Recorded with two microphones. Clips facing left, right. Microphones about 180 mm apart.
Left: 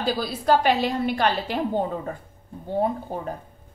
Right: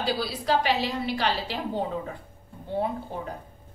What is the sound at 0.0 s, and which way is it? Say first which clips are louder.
A woman's voice: left 3 dB; 50° left (ahead or behind).